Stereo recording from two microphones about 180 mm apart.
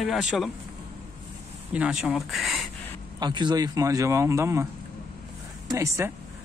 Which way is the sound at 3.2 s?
25° right (ahead or behind).